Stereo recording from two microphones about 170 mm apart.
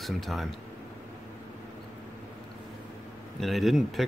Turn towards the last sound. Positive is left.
turn(degrees=0)  # may be behind; listen again after turning